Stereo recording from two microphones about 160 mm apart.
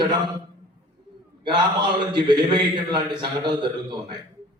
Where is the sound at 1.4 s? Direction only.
30° right (ahead or behind).